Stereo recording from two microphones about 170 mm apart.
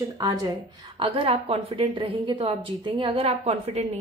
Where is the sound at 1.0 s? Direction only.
30° right (ahead or behind).